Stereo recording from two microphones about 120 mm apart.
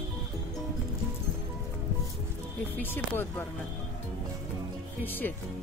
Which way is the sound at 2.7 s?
15° left (ahead or behind).